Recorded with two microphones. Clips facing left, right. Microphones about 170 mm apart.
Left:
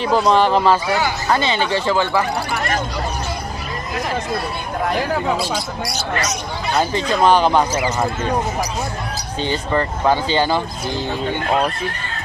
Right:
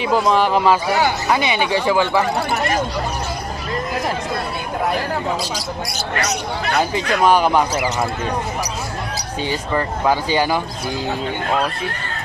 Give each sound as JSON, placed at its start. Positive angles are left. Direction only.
{"t": 0.0, "sound": "speech", "side_deg": -5}
{"t": 6.1, "sound": "speech", "side_deg": -65}
{"t": 7.2, "sound": "speech", "side_deg": -10}
{"t": 9.4, "sound": "speech", "side_deg": -10}